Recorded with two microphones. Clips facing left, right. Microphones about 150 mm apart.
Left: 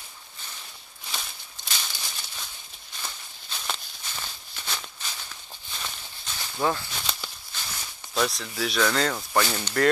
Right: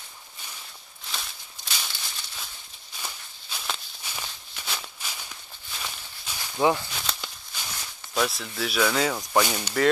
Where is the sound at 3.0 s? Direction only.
5° right (ahead or behind).